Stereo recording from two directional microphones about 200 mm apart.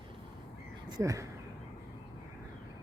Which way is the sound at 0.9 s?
20° right (ahead or behind).